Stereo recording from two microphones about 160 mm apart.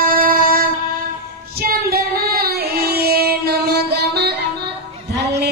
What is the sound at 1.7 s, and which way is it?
Child singing, 70° right (ahead or behind).